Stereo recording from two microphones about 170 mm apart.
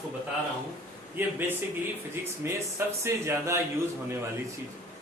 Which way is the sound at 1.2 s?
15° right (ahead or behind).